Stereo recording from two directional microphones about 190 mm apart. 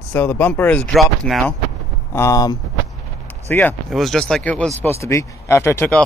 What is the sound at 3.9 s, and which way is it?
Speech, centre (ahead or behind).